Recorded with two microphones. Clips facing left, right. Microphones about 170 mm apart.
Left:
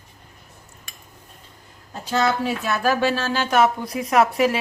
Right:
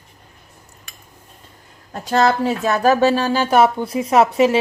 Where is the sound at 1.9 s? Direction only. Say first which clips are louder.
Right 5 dB; 45° right (ahead or behind).